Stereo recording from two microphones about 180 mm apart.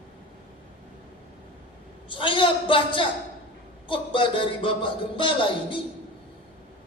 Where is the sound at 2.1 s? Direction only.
30° left (ahead or behind).